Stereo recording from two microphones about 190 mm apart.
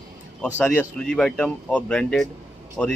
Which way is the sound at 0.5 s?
5° left (ahead or behind).